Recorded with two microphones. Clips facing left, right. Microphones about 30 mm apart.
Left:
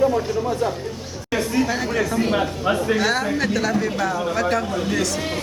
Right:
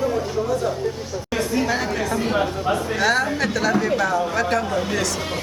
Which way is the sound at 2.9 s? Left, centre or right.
Centre.